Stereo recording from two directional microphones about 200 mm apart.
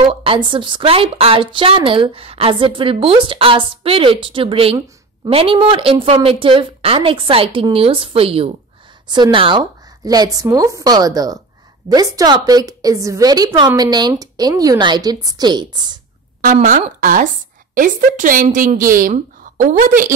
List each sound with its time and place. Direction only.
0.1 s a woman's voice: 25° right (ahead or behind)
16.3 s a woman's voice: 40° right (ahead or behind)